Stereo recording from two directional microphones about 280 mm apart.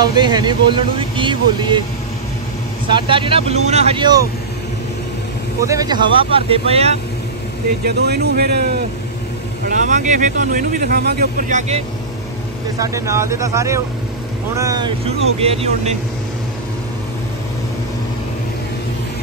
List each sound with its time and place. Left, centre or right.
0.0 s speech: centre
2.9 s speech: centre
5.6 s speech: centre
7.8 s speech: right
9.7 s speech: right
12.7 s speech: centre